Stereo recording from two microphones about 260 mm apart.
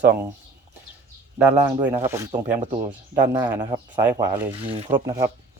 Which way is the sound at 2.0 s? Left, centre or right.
Centre.